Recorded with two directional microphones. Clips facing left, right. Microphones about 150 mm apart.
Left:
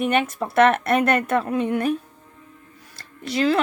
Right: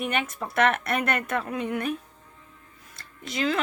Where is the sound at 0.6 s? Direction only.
55° left (ahead or behind).